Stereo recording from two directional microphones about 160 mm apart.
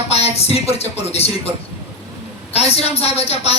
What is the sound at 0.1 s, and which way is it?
Speech, 40° left (ahead or behind).